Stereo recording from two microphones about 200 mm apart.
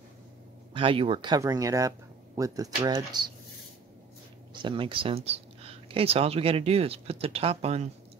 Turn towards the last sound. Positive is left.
turn(degrees=-30)  # may be behind; listen again after turning